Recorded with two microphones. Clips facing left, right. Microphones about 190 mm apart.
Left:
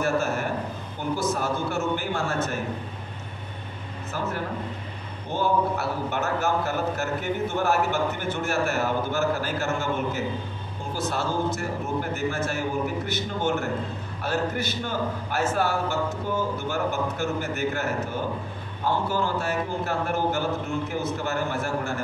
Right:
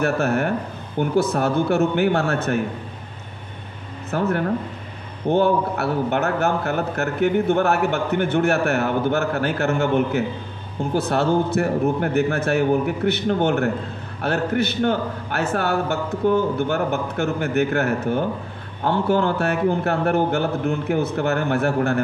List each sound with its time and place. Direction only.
0.0 s a man's voice: 65° right (ahead or behind)
4.1 s a man's voice: 60° right (ahead or behind)
5.3 s a man's voice: 60° right (ahead or behind)